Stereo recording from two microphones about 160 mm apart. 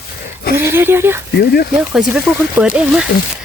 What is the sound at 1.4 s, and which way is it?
Speech, 80° left.